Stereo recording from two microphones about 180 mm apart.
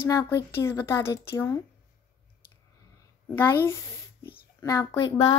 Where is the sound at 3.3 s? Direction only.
15° left (ahead or behind).